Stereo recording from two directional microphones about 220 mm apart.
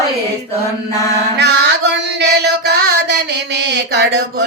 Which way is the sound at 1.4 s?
50° right (ahead or behind).